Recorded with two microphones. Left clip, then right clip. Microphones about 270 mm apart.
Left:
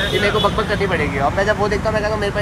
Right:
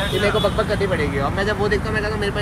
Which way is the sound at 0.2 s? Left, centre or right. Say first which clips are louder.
Even; left.